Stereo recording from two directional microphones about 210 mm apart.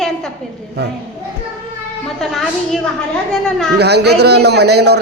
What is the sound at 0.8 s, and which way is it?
Speech, 50° right (ahead or behind).